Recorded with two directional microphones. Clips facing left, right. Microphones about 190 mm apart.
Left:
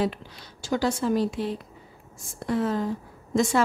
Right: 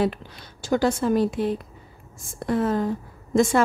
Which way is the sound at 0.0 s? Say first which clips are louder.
Right 3 dB; 55° right (ahead or behind).